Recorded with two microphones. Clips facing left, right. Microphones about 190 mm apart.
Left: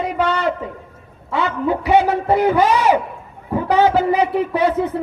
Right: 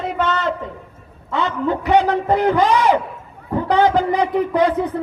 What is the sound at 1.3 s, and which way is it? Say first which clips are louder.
Speech: left 1 dB; centre (ahead or behind).